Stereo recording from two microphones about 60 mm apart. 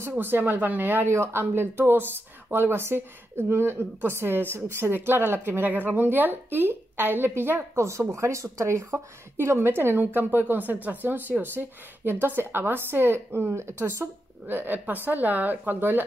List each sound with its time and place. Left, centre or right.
0.2 s a woman's voice: right
1.1 s a woman's voice: right
7.7 s a woman's voice: right
13.5 s speech: right
14.5 s a woman's voice: right